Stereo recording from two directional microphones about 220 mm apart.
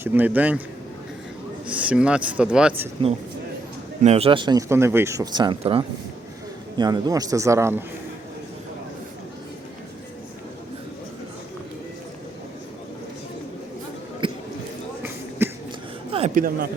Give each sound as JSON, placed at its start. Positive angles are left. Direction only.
{"t": 0.0, "sound": "a man's voice", "side_deg": -10}
{"t": 1.7, "sound": "speech", "side_deg": -5}
{"t": 4.0, "sound": "a man's voice", "side_deg": -30}
{"t": 14.2, "sound": "basketball bounce", "side_deg": -20}
{"t": 15.4, "sound": "a sound", "side_deg": -10}
{"t": 16.1, "sound": "a sound", "side_deg": -35}